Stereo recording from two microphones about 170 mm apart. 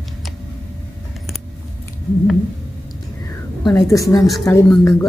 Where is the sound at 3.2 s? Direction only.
20° left (ahead or behind).